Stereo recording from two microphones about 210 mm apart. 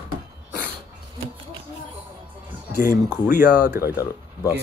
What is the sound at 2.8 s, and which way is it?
Speech, 10° right (ahead or behind).